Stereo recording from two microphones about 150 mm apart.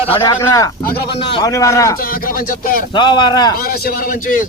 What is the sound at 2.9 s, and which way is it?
Speech, 30° left (ahead or behind).